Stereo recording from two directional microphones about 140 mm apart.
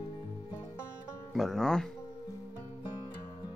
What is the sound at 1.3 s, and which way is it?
Speech, centre (ahead or behind).